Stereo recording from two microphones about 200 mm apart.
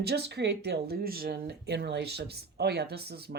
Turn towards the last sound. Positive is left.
turn(degrees=-55)  # may be behind; listen again after turning